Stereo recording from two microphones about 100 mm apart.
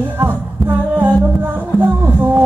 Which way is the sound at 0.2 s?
20° right (ahead or behind).